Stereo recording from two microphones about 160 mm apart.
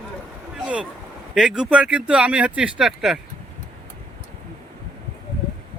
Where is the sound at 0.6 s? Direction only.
10° right (ahead or behind).